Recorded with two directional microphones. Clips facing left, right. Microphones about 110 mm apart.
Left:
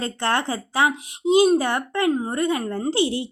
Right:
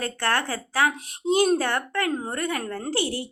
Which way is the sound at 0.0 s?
20° left (ahead or behind).